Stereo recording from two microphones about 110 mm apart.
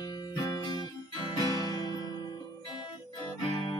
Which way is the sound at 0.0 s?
40° left (ahead or behind).